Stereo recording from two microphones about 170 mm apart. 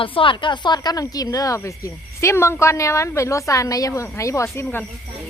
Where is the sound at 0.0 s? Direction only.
30° left (ahead or behind).